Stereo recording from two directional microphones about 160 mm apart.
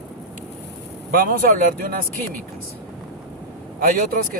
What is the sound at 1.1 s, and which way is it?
Speech, 65° right (ahead or behind).